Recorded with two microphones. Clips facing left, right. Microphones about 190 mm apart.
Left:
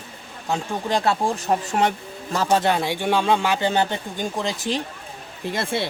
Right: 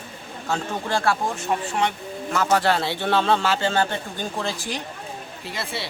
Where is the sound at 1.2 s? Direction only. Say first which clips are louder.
Left 3 dB; 40° left (ahead or behind); by 4.8 s 20° left (ahead or behind).